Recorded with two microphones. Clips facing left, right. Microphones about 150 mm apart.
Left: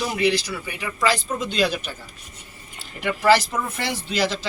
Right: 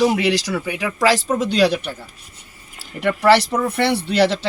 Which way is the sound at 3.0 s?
65° right (ahead or behind).